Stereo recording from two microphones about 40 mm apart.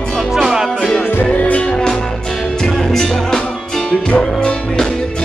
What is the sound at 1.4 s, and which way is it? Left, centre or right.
Music, left.